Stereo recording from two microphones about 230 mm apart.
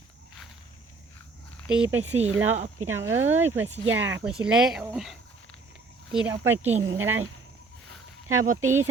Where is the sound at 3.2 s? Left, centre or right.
Right.